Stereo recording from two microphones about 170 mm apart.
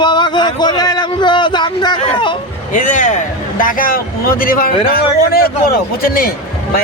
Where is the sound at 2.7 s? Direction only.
50° left (ahead or behind).